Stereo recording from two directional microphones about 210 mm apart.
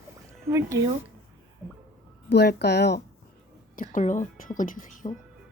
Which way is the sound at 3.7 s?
40° left (ahead or behind).